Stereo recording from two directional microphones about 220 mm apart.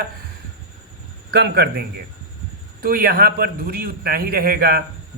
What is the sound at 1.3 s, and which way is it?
Speech, 50° right (ahead or behind).